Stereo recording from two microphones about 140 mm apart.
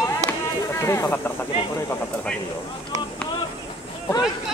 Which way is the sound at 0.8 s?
20° left (ahead or behind).